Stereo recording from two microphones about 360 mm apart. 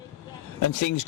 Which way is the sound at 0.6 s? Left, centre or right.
Left.